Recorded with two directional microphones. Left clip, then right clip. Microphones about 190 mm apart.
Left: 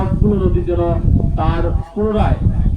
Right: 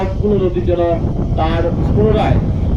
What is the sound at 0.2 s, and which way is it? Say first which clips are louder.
A man's voice: right 4 dB; 40° right (ahead or behind).